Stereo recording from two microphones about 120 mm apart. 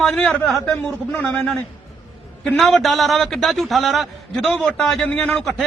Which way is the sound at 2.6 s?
Centre (ahead or behind).